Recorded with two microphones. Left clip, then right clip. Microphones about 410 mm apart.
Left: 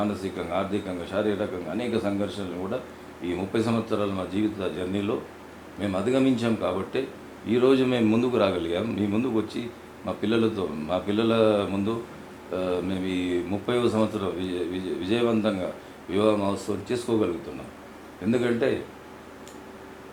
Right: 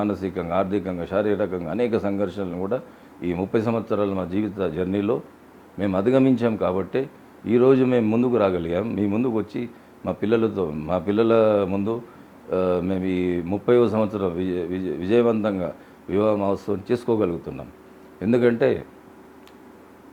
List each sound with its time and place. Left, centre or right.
0.0 s a man's voice: right
18.3 s speech: right